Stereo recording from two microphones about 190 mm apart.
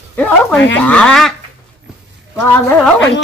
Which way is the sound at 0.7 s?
5° left (ahead or behind).